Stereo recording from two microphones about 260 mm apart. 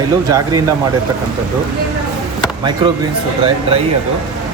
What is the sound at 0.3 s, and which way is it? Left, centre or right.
Speech, centre.